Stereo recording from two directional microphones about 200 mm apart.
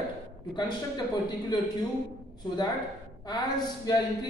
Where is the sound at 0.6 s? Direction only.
20° left (ahead or behind).